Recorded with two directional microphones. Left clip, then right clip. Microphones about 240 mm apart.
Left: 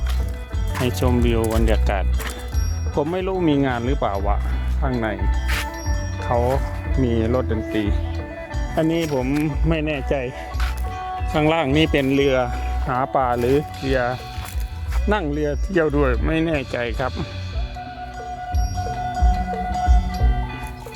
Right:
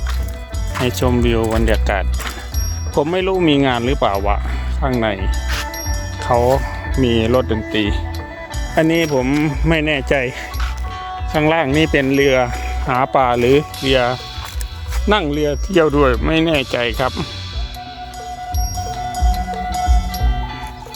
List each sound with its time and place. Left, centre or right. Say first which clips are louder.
0.9 s speech: right 4 dB; centre
6.2 s speech: right 6 dB; right
7.0 s speech: right 6 dB; right
11.3 s speech: right 4 dB; centre